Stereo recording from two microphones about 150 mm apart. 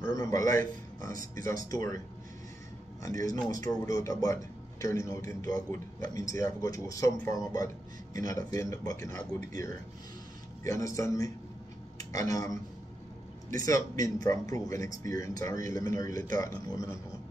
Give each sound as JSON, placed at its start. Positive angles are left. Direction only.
{"t": 0.0, "sound": "a man's voice", "side_deg": 25}
{"t": 1.7, "sound": "speech", "side_deg": 20}
{"t": 3.0, "sound": "speech", "side_deg": 25}
{"t": 5.5, "sound": "a man's voice", "side_deg": -65}
{"t": 6.0, "sound": "speech", "side_deg": 25}
{"t": 10.6, "sound": "speech", "side_deg": 20}